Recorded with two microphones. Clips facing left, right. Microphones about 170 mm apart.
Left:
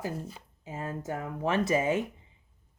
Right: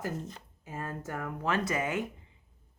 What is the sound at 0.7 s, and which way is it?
Speech, 20° left (ahead or behind).